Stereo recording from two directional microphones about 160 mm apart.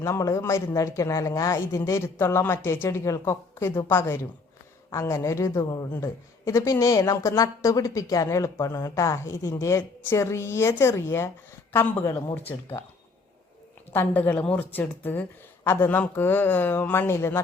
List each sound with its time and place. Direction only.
0.0 s a woman's voice: 20° left (ahead or behind)
13.9 s speech: 10° left (ahead or behind)